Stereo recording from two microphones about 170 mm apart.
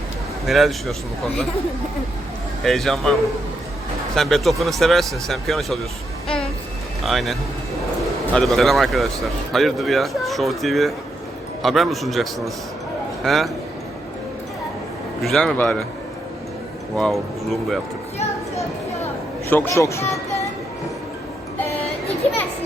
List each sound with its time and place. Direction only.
0.4 s speech: centre (ahead or behind)
2.6 s speech: centre (ahead or behind)
7.0 s speech: centre (ahead or behind)
15.2 s speech: centre (ahead or behind)
17.0 s speech: centre (ahead or behind)
19.5 s speech: 15° left (ahead or behind)